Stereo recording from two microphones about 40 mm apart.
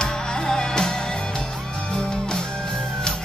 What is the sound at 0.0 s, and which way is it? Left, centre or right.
Music, centre.